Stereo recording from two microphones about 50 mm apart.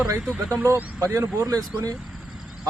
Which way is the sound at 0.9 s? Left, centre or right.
Right.